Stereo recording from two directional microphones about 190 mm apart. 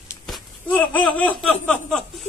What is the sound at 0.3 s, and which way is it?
Laughter, 10° left (ahead or behind).